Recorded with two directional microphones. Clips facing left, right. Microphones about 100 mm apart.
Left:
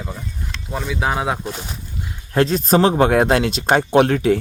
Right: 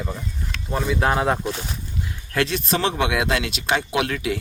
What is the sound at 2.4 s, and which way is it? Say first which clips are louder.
Speech: left 7 dB; 40° left (ahead or behind).